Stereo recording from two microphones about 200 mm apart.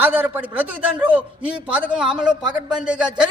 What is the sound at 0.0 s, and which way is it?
A man's voice, 10° right (ahead or behind).